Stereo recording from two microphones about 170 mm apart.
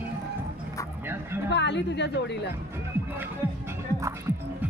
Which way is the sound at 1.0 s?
15° right (ahead or behind).